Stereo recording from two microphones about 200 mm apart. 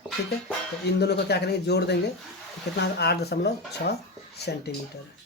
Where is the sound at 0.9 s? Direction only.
55° left (ahead or behind).